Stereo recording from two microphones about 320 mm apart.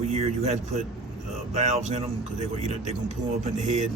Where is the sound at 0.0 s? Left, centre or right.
Right.